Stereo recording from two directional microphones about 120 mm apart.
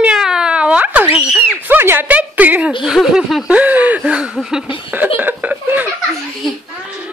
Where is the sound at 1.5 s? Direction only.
15° right (ahead or behind).